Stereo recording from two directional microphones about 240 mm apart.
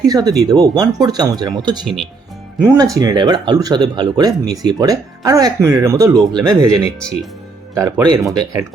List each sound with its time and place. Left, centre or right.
0.0 s speech: centre